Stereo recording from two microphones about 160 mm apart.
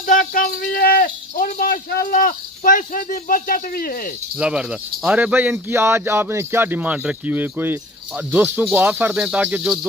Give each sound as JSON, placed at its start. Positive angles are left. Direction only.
{"t": 0.0, "sound": "speech", "side_deg": 55}
{"t": 4.4, "sound": "speech", "side_deg": -5}